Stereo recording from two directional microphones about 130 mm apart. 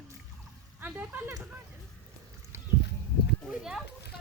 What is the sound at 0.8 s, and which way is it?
Speech, 15° right (ahead or behind).